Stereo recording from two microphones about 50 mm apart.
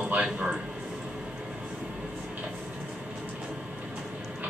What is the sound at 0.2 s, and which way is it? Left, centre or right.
Speech, centre.